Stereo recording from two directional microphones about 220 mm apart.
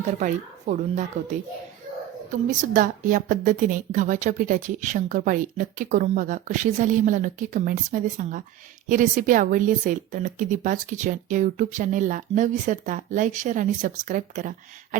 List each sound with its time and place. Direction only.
0.2 s a woman's voice: 35° right (ahead or behind)
2.5 s a woman's voice: 35° right (ahead or behind)